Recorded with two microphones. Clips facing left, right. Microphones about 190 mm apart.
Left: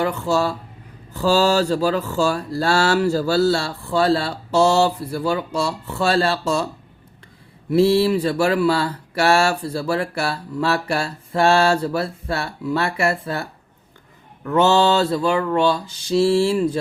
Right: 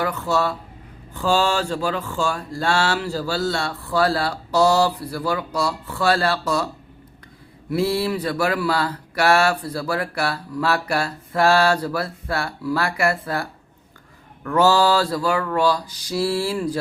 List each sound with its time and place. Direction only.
0.0 s speech: 30° left (ahead or behind)
7.7 s speech: 25° left (ahead or behind)